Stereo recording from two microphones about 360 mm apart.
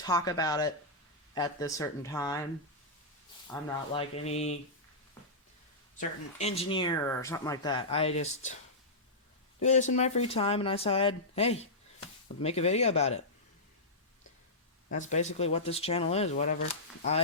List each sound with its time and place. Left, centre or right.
0.0 s speech: centre
3.4 s speech: centre
6.0 s speech: centre
9.6 s speech: centre
14.8 s speech: centre